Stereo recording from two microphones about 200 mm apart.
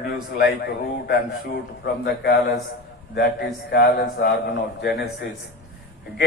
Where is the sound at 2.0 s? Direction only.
55° left (ahead or behind).